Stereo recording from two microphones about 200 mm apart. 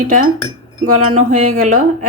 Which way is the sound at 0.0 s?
40° right (ahead or behind).